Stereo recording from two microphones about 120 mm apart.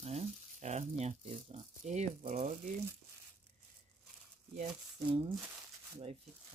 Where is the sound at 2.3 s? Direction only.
85° right.